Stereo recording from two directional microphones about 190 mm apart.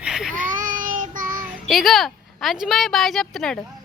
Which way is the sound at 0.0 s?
Centre (ahead or behind).